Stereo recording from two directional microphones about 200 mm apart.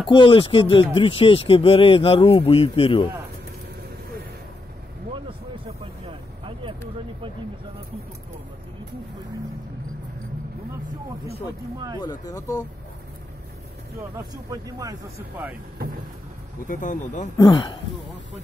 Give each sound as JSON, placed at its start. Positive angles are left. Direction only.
{"t": 0.1, "sound": "speech", "side_deg": 25}
{"t": 5.7, "sound": "vehicle", "side_deg": -30}
{"t": 12.0, "sound": "speech", "side_deg": 20}
{"t": 14.1, "sound": "speech", "side_deg": -20}
{"t": 16.6, "sound": "speech", "side_deg": 40}
{"t": 17.4, "sound": "speech", "side_deg": 20}